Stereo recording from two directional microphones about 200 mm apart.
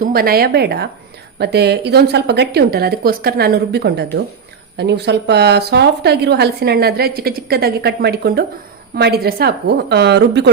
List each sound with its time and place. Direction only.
0.0 s a woman's voice: 50° right (ahead or behind)